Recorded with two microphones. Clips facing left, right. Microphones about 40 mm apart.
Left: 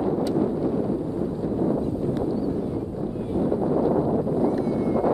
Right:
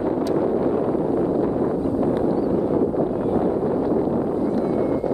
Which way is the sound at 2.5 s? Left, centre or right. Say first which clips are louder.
Right 8 dB; right.